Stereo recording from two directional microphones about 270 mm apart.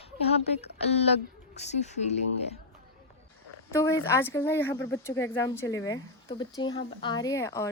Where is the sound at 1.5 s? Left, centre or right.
Left.